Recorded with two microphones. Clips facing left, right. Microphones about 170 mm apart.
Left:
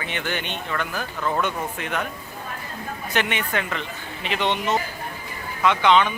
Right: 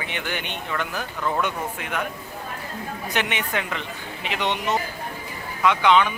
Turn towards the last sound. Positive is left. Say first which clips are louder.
# even
turn(degrees=-10)  # may be behind; listen again after turning